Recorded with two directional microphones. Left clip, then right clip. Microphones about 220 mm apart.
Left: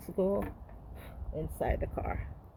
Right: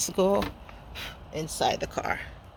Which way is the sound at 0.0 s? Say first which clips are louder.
Right 7 dB; 20° right (ahead or behind).